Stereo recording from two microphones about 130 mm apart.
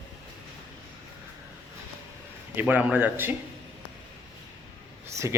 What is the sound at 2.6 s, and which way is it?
Speech, 15° right (ahead or behind).